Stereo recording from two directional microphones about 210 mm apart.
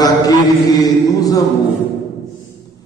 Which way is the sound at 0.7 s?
15° left (ahead or behind).